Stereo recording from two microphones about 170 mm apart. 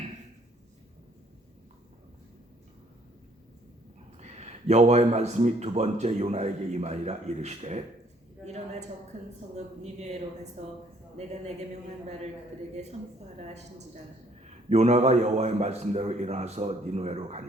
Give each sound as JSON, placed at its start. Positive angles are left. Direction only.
{"t": 4.2, "sound": "speech", "side_deg": -40}
{"t": 9.1, "sound": "speech", "side_deg": -40}
{"t": 13.4, "sound": "a woman's voice", "side_deg": -40}